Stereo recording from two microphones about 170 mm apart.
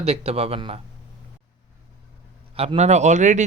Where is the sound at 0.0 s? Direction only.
40° right (ahead or behind).